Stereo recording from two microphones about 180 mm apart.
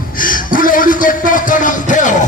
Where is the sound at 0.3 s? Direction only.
50° left (ahead or behind).